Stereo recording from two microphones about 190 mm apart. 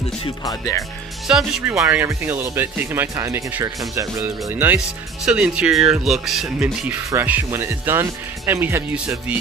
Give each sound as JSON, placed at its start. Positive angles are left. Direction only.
{"t": 0.5, "sound": "speech", "side_deg": 20}
{"t": 1.2, "sound": "speech", "side_deg": 0}
{"t": 1.8, "sound": "speech", "side_deg": -15}